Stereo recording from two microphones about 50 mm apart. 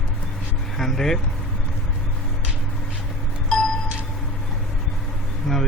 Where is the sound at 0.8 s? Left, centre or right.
Centre.